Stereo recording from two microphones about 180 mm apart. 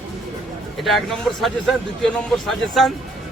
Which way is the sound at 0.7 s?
Centre (ahead or behind).